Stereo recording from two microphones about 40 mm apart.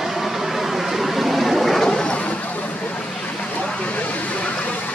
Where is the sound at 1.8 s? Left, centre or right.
Left.